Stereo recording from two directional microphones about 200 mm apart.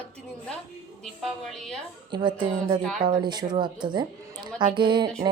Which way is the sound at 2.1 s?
25° right (ahead or behind).